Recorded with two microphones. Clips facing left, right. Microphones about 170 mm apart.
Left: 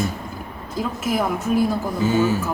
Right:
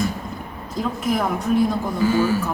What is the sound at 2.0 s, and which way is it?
Speech, 20° left (ahead or behind).